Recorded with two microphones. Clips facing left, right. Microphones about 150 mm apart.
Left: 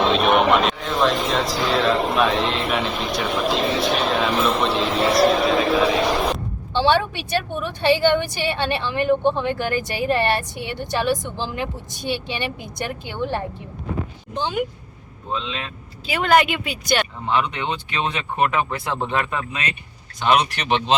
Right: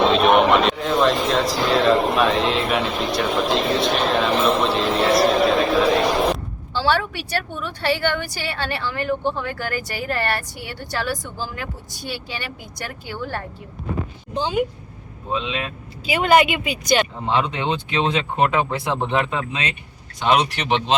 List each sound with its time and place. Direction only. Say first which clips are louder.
0.0 s speech: right 2 dB; centre (ahead or behind)
6.7 s a woman's voice: left 2 dB; 20° left (ahead or behind)
14.3 s speech: right 2 dB; 10° right (ahead or behind)
17.2 s speech: right 1 dB; 25° right (ahead or behind)